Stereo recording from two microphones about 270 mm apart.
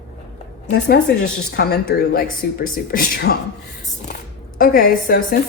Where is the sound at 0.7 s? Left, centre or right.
Left.